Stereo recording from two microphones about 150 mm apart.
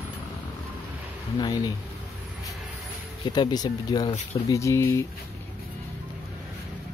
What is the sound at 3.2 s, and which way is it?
Speech, 25° left (ahead or behind).